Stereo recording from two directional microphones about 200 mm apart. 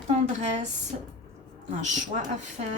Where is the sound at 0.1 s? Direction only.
35° right (ahead or behind).